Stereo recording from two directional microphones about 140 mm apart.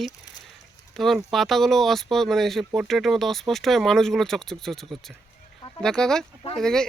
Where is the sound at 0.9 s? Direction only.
Centre (ahead or behind).